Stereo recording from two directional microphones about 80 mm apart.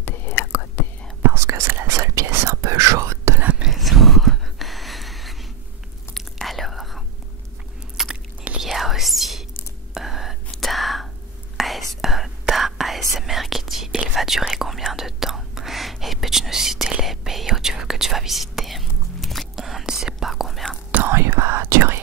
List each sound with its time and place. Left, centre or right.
0.0 s whispering: left
1.3 s whispering: right
3.3 s whispering: right
3.6 s a sound: centre
6.1 s whispering: centre
8.0 s biting: centre
8.5 s whispering: centre
20.9 s whispering: right